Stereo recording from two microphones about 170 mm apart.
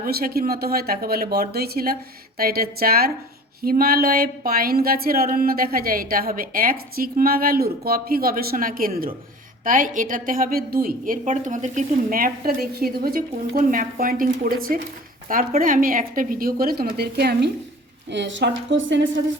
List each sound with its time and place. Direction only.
0.0 s speech: 60° right (ahead or behind)
18.1 s a woman's voice: 90° right